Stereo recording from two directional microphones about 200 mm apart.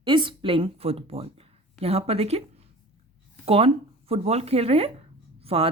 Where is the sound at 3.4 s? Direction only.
30° right (ahead or behind).